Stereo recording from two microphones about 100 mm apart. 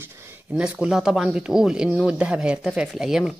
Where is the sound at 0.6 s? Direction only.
10° right (ahead or behind).